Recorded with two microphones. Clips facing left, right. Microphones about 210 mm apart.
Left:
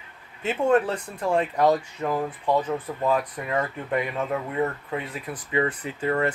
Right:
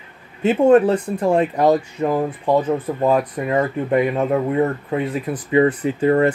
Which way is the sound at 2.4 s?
40° right (ahead or behind).